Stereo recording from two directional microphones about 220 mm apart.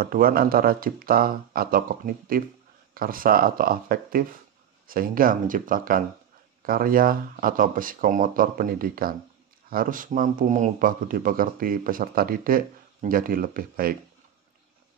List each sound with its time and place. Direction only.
0.0 s speech: 40° right (ahead or behind)